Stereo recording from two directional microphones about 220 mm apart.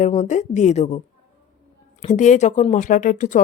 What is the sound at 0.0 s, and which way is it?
A woman's voice, 30° left (ahead or behind).